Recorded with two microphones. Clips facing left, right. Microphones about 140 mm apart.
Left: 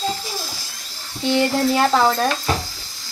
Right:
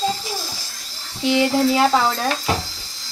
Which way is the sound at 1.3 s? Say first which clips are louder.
Right 1 dB; 5° right (ahead or behind).